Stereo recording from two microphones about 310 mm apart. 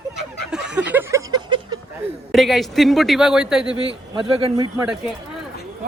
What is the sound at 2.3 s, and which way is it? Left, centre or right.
Speech, centre.